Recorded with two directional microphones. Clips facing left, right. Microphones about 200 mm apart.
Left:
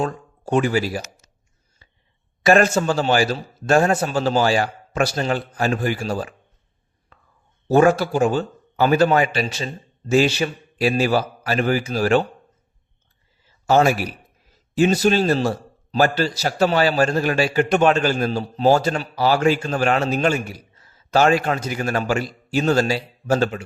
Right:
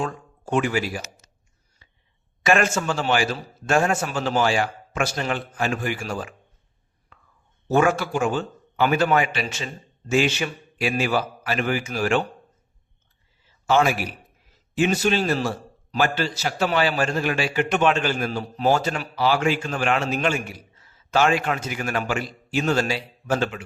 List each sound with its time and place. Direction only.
0.0 s speech: 40° left (ahead or behind)
1.8 s cough: 35° left (ahead or behind)
2.4 s a man's voice: 35° left (ahead or behind)
7.7 s a man's voice: 35° left (ahead or behind)
13.7 s a man's voice: 40° left (ahead or behind)